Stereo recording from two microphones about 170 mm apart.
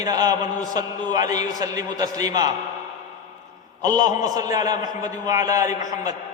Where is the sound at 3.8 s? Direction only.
25° right (ahead or behind).